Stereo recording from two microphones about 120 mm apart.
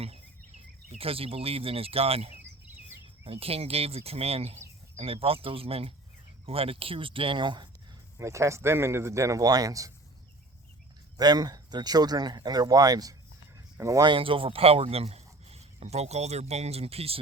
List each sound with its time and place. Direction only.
0.0 s cricket: 55° right (ahead or behind)
0.9 s speech: 50° right (ahead or behind)
8.2 s speech: 25° right (ahead or behind)
11.2 s speech: 35° right (ahead or behind)
14.1 s speech: 50° right (ahead or behind)